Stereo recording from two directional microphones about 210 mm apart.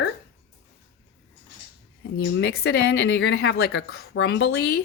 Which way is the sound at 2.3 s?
55° left (ahead or behind).